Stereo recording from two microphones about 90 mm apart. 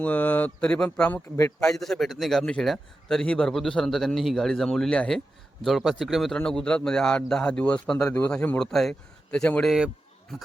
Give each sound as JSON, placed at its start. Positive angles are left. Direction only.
{"t": 0.0, "sound": "a man's voice", "side_deg": 20}
{"t": 1.4, "sound": "a man's voice", "side_deg": 35}
{"t": 1.6, "sound": "a man's voice", "side_deg": 5}
{"t": 5.6, "sound": "a man's voice", "side_deg": 0}